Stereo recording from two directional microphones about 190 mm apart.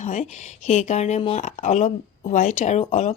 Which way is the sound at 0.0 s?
40° left (ahead or behind).